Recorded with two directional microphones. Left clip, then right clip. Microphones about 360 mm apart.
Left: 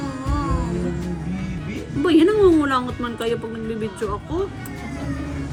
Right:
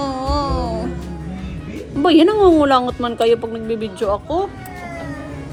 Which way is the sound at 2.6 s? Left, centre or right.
Centre.